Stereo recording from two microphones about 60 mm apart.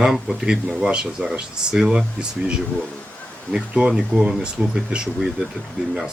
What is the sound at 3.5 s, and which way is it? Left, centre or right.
Speech, right.